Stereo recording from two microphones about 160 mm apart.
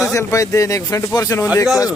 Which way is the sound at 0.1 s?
20° left (ahead or behind).